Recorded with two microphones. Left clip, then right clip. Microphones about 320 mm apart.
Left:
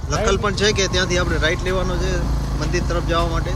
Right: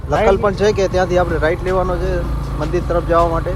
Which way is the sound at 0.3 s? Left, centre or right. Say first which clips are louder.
Right 4 dB; centre.